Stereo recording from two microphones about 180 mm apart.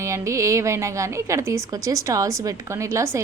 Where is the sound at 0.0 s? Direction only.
15° right (ahead or behind).